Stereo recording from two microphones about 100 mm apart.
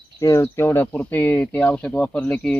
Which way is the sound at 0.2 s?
30° left (ahead or behind).